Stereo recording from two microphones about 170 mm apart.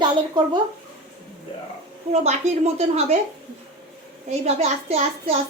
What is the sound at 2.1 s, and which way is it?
Speech, 40° right (ahead or behind).